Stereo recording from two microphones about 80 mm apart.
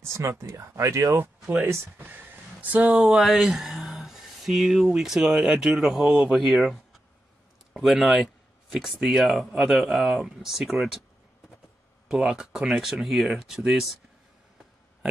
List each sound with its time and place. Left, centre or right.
0.1 s speech: right
2.8 s speech: centre
12.1 s speech: centre